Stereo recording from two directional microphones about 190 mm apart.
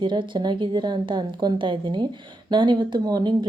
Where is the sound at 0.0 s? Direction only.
25° right (ahead or behind).